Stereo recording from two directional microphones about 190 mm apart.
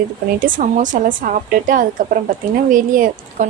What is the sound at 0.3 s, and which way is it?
A woman's voice, 45° right (ahead or behind).